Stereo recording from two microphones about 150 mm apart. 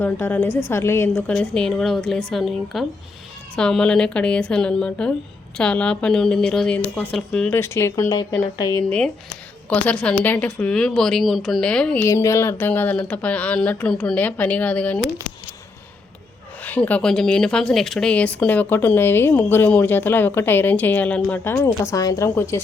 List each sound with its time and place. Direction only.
0.0 s speech: 15° left (ahead or behind)
7.5 s speech: 15° left (ahead or behind)
9.6 s speech: 10° left (ahead or behind)
12.0 s speech: 20° left (ahead or behind)
16.6 s speech: 10° left (ahead or behind)